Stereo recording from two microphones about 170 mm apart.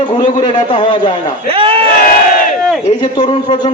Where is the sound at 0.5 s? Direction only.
30° left (ahead or behind).